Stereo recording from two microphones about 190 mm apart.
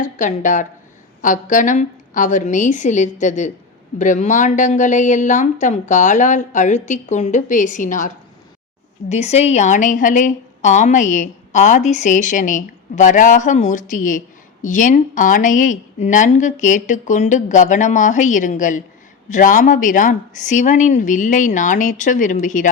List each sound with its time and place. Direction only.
0.0 s a woman's voice: 40° left (ahead or behind)